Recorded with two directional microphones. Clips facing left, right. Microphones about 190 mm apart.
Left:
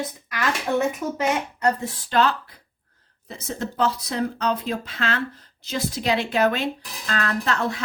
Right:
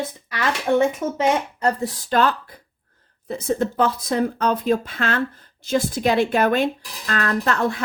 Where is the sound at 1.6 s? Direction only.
40° right (ahead or behind).